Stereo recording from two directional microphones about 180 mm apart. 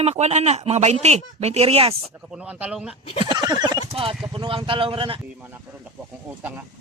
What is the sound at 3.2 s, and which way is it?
Speech, 25° right (ahead or behind).